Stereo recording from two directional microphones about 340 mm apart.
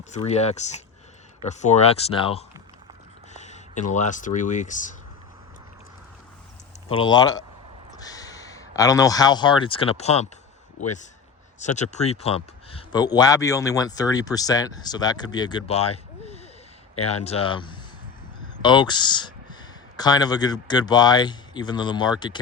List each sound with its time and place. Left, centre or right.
0.1 s speech: centre
6.8 s speech: centre